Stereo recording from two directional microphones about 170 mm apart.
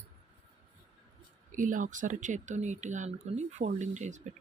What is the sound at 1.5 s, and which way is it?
Speech, 50° right (ahead or behind).